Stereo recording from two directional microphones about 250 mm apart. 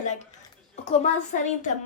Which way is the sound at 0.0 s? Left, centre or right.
Left.